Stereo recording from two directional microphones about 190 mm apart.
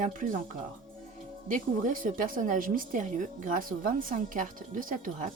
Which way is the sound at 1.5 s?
45° right (ahead or behind).